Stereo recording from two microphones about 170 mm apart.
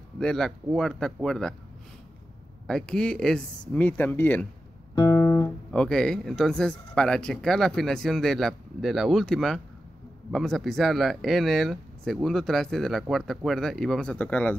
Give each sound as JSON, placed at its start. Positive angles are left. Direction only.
{"t": 0.2, "sound": "speech", "side_deg": 0}
{"t": 2.6, "sound": "speech", "side_deg": 5}
{"t": 4.9, "sound": "guitar", "side_deg": 20}
{"t": 5.7, "sound": "speech", "side_deg": 5}